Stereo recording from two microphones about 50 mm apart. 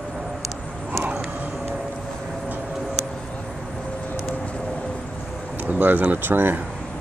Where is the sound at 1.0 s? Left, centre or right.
Right.